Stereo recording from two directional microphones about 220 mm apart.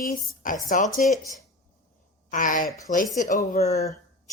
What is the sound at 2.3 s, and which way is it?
A woman's voice, 35° left (ahead or behind).